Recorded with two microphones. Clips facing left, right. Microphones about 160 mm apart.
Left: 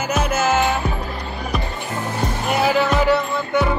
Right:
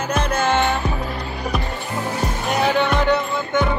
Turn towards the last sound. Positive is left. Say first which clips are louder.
# left 1 dB
turn(degrees=0)  # may be behind; listen again after turning